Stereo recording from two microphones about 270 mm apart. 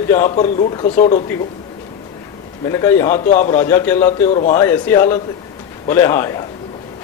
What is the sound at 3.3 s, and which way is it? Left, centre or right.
Speech, left.